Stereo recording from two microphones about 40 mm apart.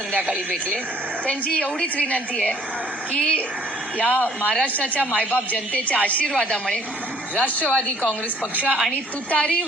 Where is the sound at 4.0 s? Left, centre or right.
Left.